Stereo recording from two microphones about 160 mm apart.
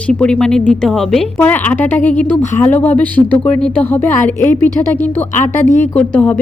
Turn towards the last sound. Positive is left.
turn(degrees=5)  # may be behind; listen again after turning